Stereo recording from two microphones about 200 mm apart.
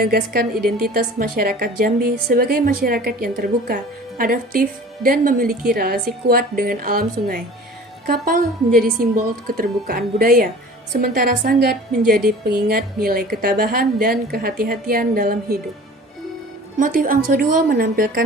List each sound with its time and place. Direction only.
0.0 s a woman's voice: 50° right (ahead or behind)
16.7 s a woman's voice: 45° right (ahead or behind)